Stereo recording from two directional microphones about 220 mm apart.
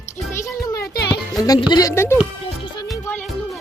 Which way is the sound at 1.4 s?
15° left (ahead or behind).